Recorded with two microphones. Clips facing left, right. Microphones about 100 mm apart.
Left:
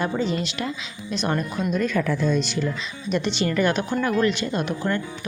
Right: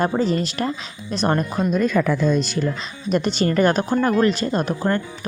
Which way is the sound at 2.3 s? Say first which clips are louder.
Right 3 dB; 40° right (ahead or behind).